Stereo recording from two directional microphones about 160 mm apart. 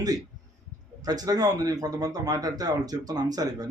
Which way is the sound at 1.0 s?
25° right (ahead or behind).